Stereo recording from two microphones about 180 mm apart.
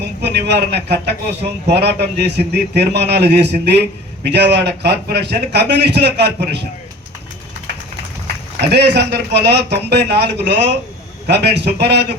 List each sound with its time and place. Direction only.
0.2 s a man's voice: 70° right (ahead or behind)
8.6 s a man's voice: 70° right (ahead or behind)